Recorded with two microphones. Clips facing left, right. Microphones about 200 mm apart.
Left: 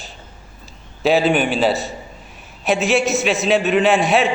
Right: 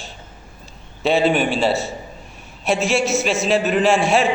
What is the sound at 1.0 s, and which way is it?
A man's voice, centre (ahead or behind).